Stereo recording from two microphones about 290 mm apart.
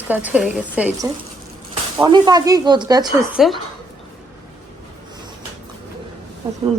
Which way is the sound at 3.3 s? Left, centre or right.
Centre.